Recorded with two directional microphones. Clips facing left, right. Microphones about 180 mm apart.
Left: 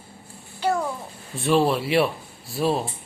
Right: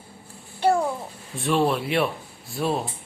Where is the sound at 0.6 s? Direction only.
30° right (ahead or behind).